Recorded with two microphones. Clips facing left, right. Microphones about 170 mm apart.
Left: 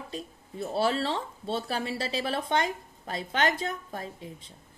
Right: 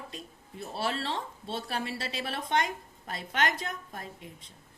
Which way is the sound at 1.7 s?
30° left (ahead or behind).